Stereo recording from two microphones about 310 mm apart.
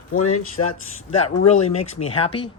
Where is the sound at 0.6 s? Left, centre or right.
Left.